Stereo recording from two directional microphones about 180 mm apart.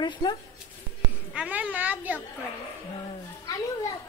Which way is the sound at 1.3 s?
10° right (ahead or behind).